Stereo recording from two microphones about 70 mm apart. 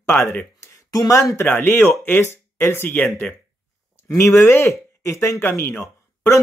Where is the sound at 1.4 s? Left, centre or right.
Left.